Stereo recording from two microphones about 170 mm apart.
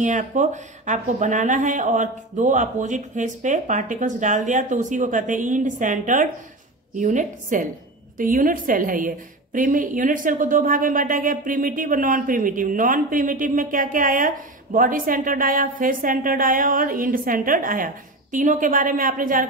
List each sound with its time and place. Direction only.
0.0 s a woman's voice: 50° right (ahead or behind)